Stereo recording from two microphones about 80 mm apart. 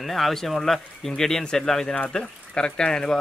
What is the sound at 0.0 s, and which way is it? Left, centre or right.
Speech, centre.